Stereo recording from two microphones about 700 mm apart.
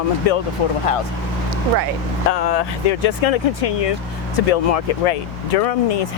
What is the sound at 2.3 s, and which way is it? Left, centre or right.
Speech, left.